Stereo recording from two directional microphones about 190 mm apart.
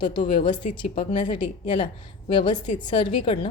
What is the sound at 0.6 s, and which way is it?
Speech, 40° left (ahead or behind).